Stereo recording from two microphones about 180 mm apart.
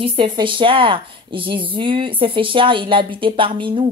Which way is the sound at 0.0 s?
30° right (ahead or behind).